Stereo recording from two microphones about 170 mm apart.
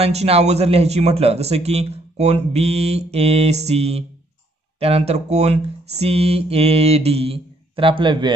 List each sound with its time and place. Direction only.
0.0 s speech: 40° right (ahead or behind)